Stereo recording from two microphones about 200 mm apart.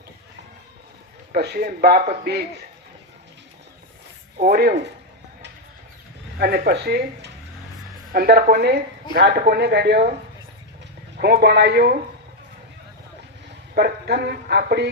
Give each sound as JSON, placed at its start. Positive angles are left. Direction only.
{"t": 1.3, "sound": "speech", "side_deg": -50}
{"t": 4.4, "sound": "speech", "side_deg": -50}
{"t": 6.4, "sound": "speech", "side_deg": -50}
{"t": 11.2, "sound": "speech", "side_deg": -50}
{"t": 13.7, "sound": "speech", "side_deg": -50}